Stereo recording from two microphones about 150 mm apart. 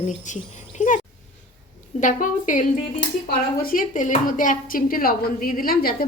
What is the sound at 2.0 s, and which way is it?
Speech, 60° left (ahead or behind).